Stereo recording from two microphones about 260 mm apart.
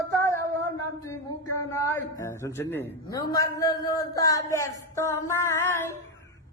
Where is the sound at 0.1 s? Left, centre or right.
Centre.